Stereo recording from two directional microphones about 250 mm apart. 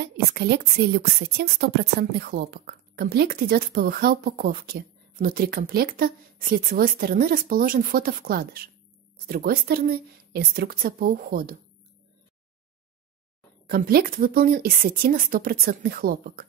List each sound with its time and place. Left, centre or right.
0.0 s a woman's voice: right
13.7 s a woman's voice: right